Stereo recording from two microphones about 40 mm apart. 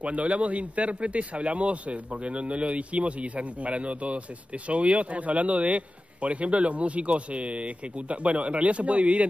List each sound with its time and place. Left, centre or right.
0.0 s a man's voice: right